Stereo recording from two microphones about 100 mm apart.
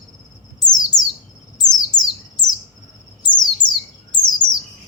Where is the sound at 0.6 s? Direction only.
40° left (ahead or behind).